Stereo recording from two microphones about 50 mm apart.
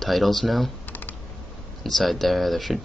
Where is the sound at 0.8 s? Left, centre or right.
Left.